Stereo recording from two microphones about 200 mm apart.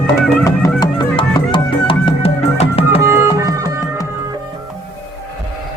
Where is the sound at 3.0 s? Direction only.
15° right (ahead or behind).